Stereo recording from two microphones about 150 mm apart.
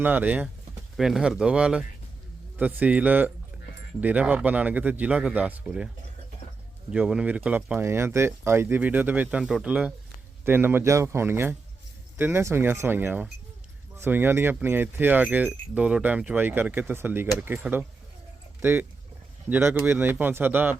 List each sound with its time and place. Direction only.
0.0 s speech: 10° right (ahead or behind)
6.9 s speech: 5° right (ahead or behind)